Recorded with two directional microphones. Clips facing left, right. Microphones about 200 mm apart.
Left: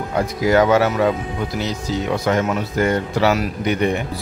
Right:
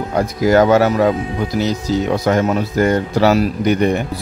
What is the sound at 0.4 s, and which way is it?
Speech, 40° right (ahead or behind).